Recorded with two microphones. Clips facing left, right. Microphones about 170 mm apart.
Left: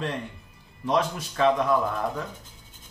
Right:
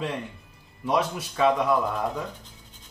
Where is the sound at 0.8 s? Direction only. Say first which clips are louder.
Even; 10° right (ahead or behind).